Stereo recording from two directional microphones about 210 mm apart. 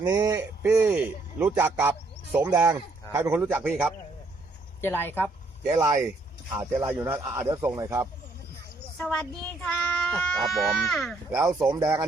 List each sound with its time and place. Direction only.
0.0 s a man's voice: 15° right (ahead or behind)
4.8 s speech: 10° left (ahead or behind)
5.7 s speech: 20° right (ahead or behind)
6.6 s a man's voice: 10° right (ahead or behind)
9.0 s speech: 5° left (ahead or behind)
11.4 s a man's voice: 15° right (ahead or behind)